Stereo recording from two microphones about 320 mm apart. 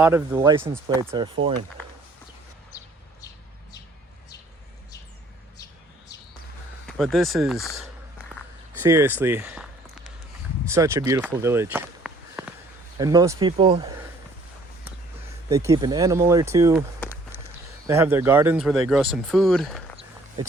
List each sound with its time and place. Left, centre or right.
0.0 s speech: centre
1.4 s speech: right
6.8 s speech: centre
10.7 s speech: centre
15.4 s speech: centre
17.8 s speech: centre